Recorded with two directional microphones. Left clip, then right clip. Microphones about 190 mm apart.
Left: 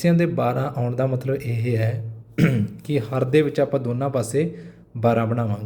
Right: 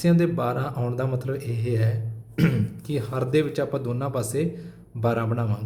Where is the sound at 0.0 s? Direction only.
15° left (ahead or behind).